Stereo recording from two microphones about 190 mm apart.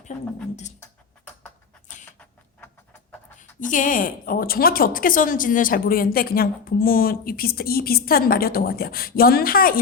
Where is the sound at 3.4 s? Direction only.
45° left (ahead or behind).